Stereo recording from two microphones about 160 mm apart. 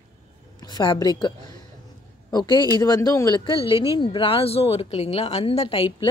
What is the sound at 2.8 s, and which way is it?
A woman's voice, 20° left (ahead or behind).